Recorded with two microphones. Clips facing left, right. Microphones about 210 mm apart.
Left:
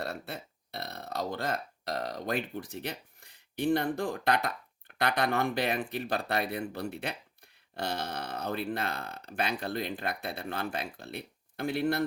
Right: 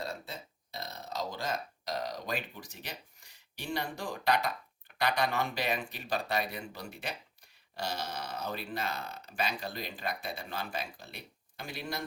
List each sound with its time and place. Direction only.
0.0 s speech: 65° left (ahead or behind)